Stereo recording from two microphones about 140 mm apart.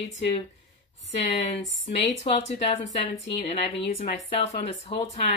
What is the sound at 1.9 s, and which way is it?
A woman's voice, 50° left (ahead or behind).